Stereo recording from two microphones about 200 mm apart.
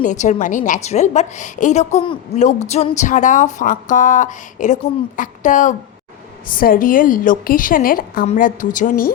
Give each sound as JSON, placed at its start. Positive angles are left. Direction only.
{"t": 0.0, "sound": "a woman's voice", "side_deg": 35}